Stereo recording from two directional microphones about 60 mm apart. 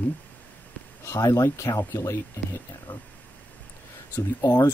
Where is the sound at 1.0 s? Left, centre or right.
Left.